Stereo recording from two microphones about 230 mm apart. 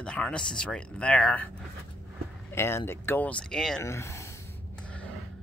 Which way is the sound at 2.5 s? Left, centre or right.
Centre.